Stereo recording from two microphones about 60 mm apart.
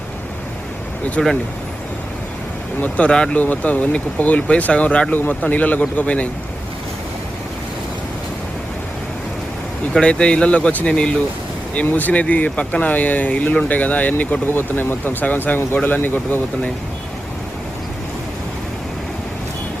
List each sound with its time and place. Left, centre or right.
1.2 s speech: centre
3.0 s speech: left
5.1 s speech: left
9.9 s speech: centre
11.9 s speech: left